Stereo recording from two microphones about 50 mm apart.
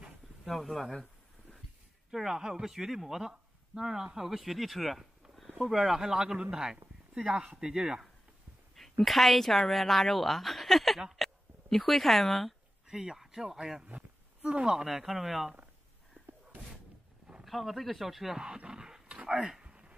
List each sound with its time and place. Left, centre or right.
0.5 s a woman's voice: centre
2.0 s speech: centre
9.0 s a woman's voice: centre
11.0 s speech: centre
11.2 s speech: centre
12.8 s speech: centre
14.9 s a woman's voice: centre
17.5 s a woman's voice: centre
18.4 s speech: centre
19.2 s a sound: centre